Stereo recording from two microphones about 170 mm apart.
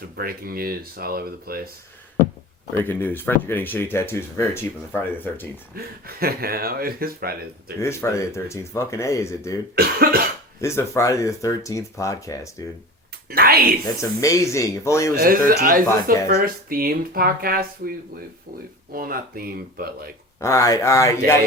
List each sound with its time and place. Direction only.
0.2 s speech: 60° right (ahead or behind)
2.8 s speech: 10° left (ahead or behind)
5.7 s speech: 65° right (ahead or behind)
7.8 s speech: 15° left (ahead or behind)
9.7 s cough: 65° right (ahead or behind)
10.6 s speech: 15° left (ahead or behind)
13.3 s speech: 65° right (ahead or behind)
14.2 s speech: 20° left (ahead or behind)
15.2 s speech: 55° right (ahead or behind)
18.9 s speech: 60° right (ahead or behind)
20.4 s speech: 20° left (ahead or behind)